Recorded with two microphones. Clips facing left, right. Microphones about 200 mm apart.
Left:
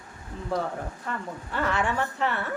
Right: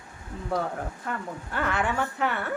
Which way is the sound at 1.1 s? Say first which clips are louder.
Even; 5° right (ahead or behind).